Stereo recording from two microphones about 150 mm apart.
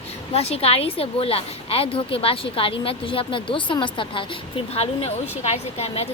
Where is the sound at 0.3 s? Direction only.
45° left (ahead or behind).